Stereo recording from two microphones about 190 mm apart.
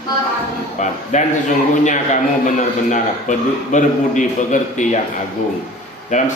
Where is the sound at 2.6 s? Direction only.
40° left (ahead or behind).